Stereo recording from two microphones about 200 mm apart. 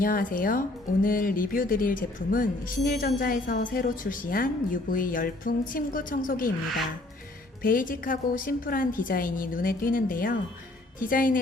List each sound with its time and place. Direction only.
0.0 s speech: 45° left (ahead or behind)
7.6 s speech: 45° left (ahead or behind)